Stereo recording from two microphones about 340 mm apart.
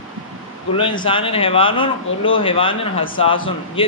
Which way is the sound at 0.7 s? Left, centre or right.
Centre.